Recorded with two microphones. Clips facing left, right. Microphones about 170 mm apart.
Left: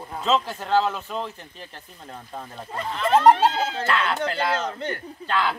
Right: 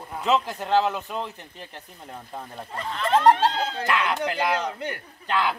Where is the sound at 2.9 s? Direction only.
5° left (ahead or behind).